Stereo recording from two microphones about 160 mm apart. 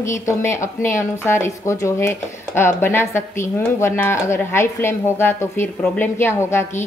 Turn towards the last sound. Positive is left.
turn(degrees=15)  # may be behind; listen again after turning